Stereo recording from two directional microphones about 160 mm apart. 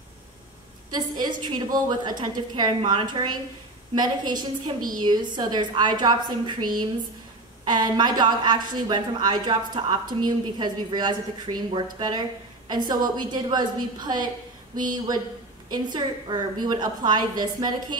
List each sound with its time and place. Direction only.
0.9 s a woman's voice: 25° right (ahead or behind)
15.7 s a woman's voice: 25° right (ahead or behind)